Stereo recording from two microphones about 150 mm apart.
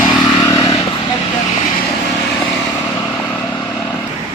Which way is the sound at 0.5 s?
20° left (ahead or behind).